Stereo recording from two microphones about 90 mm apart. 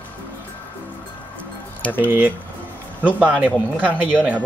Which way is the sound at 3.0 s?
15° right (ahead or behind).